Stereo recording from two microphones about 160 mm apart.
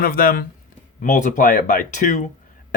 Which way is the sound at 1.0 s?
50° left (ahead or behind).